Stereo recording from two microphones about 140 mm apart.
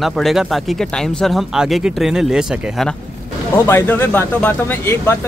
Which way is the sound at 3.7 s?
15° left (ahead or behind).